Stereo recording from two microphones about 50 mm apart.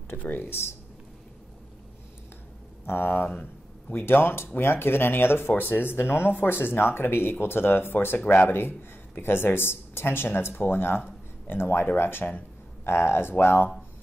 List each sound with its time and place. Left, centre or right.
0.2 s speech: left
2.9 s speech: left
3.9 s speech: left